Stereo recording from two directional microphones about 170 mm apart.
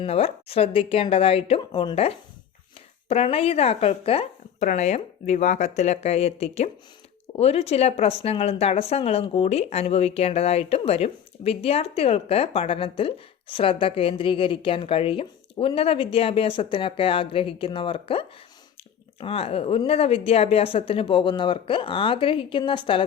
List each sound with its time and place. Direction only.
0.0 s speech: 35° left (ahead or behind)